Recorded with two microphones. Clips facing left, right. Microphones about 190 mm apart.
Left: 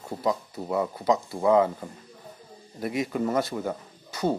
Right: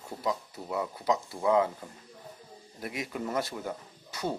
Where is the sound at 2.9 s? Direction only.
45° left (ahead or behind).